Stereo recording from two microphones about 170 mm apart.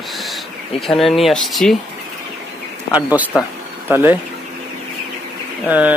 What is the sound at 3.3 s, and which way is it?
Speech, 5° right (ahead or behind).